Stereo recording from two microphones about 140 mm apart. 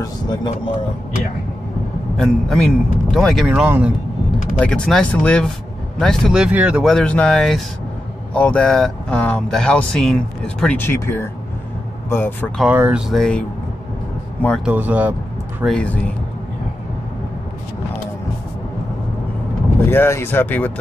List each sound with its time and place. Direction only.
0.0 s a sound: 30° left (ahead or behind)
2.1 s a man's voice: 5° left (ahead or behind)
3.4 s speech: 10° right (ahead or behind)
4.6 s a man's voice: 5° left (ahead or behind)
6.9 s a man's voice: 5° left (ahead or behind)
12.6 s speech: 10° right (ahead or behind)
13.1 s a man's voice: 5° left (ahead or behind)
14.6 s speech: 10° right (ahead or behind)
15.6 s speech: 5° left (ahead or behind)
19.8 s speech: 15° left (ahead or behind)